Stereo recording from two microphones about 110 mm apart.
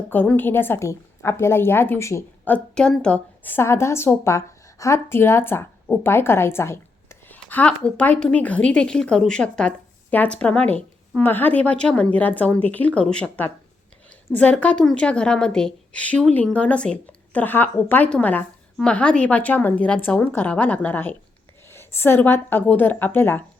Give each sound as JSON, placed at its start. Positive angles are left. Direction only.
{"t": 0.1, "sound": "a woman's voice", "side_deg": 15}
{"t": 2.5, "sound": "a woman's voice", "side_deg": 5}